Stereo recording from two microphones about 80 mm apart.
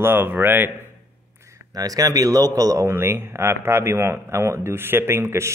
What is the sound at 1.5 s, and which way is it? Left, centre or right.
Speech, right.